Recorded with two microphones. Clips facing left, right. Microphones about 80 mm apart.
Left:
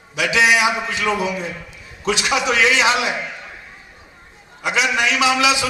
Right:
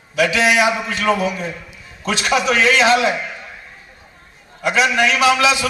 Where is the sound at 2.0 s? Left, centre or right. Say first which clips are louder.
Left 1 dB; left.